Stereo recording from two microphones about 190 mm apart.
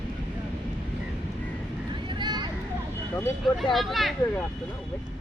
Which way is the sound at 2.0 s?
25° right (ahead or behind).